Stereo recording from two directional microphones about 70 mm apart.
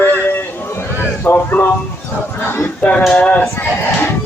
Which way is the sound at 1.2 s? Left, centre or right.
Left.